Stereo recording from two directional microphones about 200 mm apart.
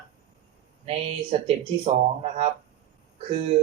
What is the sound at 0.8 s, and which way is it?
Speech, 30° right (ahead or behind).